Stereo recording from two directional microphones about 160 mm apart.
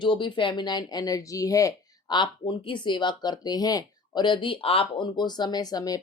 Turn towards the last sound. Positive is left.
turn(degrees=25)  # may be behind; listen again after turning